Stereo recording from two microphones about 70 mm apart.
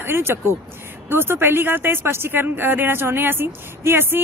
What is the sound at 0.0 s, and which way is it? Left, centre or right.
Speech, right.